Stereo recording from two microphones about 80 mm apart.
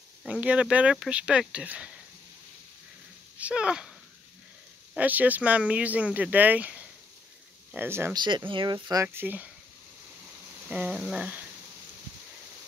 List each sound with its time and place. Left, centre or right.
0.3 s speech: centre
3.3 s speech: centre
4.9 s speech: centre
8.1 s speech: right
8.5 s speech: right
9.0 s speech: right
10.7 s speech: centre